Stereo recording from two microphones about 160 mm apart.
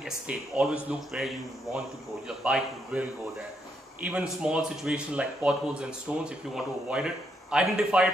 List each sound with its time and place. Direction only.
0.0 s a man's voice: 5° right (ahead or behind)